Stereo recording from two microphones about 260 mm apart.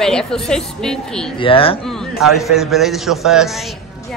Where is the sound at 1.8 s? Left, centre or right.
Centre.